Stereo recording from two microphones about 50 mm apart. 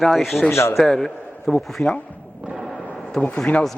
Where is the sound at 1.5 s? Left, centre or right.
Left.